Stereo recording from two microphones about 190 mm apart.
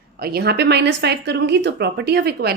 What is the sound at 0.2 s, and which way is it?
Speech, 55° right (ahead or behind).